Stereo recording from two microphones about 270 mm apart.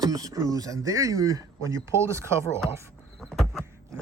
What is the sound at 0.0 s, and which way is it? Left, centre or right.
Speech, centre.